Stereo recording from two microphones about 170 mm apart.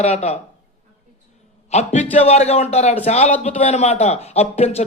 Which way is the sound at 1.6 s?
40° left (ahead or behind).